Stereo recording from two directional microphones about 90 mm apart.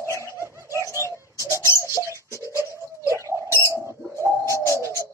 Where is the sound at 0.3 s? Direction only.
30° right (ahead or behind).